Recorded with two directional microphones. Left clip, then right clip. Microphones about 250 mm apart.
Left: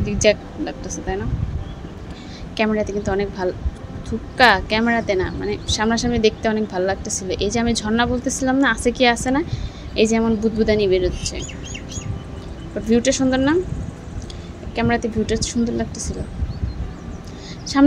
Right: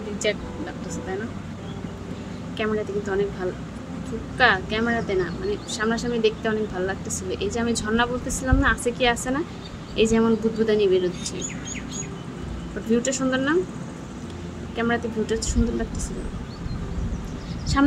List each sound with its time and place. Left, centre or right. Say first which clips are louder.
0.2 s a woman's voice: left 9 dB; left
2.5 s a woman's voice: left 5 dB; left
12.9 s a woman's voice: left 5 dB; centre
14.8 s a woman's voice: left 4 dB; centre